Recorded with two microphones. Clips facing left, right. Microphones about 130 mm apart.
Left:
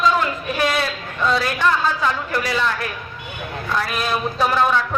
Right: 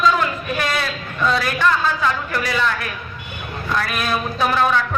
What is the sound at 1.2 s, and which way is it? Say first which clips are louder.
A man's voice: even; 20° left (ahead or behind).